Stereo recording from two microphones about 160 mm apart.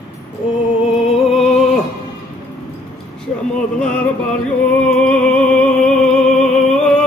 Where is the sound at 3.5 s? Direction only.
5° left (ahead or behind).